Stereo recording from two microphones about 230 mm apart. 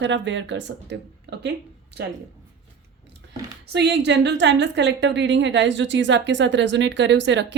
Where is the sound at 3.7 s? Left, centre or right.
Right.